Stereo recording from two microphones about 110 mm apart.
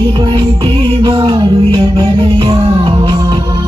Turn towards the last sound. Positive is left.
turn(degrees=-50)  # may be behind; listen again after turning